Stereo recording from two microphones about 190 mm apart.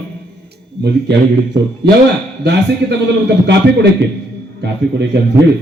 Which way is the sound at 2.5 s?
65° right (ahead or behind).